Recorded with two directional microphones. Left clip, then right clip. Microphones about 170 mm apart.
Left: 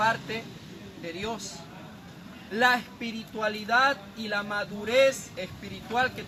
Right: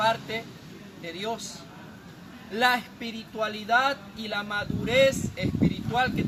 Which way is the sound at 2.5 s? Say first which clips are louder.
Even; centre (ahead or behind).